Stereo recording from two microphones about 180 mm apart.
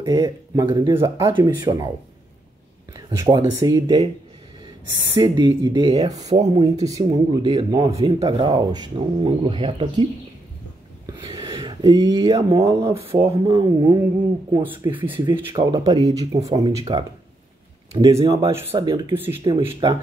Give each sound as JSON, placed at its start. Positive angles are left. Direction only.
{"t": 0.0, "sound": "speech", "side_deg": -20}
{"t": 2.9, "sound": "speech", "side_deg": -20}
{"t": 5.1, "sound": "speech", "side_deg": -25}
{"t": 6.3, "sound": "speech", "side_deg": -35}
{"t": 6.6, "sound": "speech", "side_deg": -20}
{"t": 11.1, "sound": "speech", "side_deg": -20}
{"t": 12.9, "sound": "speech", "side_deg": -30}
{"t": 13.7, "sound": "speech", "side_deg": -15}
{"t": 15.1, "sound": "speech", "side_deg": -30}